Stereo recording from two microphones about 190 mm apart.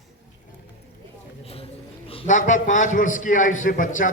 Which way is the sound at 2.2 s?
40° left (ahead or behind).